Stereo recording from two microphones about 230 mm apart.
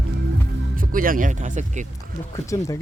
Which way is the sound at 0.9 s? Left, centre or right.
Right.